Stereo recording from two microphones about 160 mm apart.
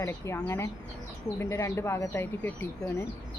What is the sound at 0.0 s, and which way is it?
Speech, 15° left (ahead or behind).